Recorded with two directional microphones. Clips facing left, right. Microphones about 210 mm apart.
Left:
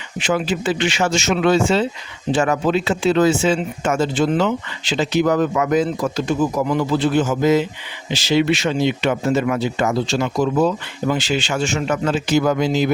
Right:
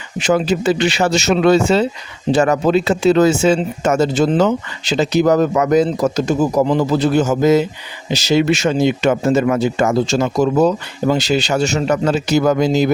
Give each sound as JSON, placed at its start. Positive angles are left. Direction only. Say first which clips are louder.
{"t": 0.2, "sound": "speech", "louder": "right 5 dB", "side_deg": -40}